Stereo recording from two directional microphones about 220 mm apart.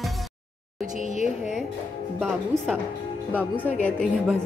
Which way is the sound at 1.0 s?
35° right (ahead or behind).